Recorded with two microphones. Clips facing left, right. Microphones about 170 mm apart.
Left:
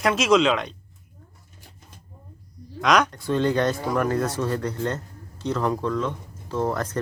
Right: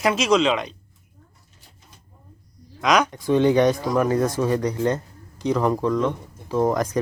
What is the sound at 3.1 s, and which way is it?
Speech, 15° right (ahead or behind).